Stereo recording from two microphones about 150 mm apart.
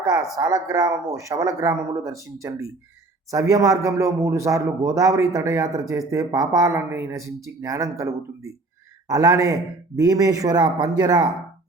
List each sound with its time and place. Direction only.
0.1 s speech: 25° right (ahead or behind)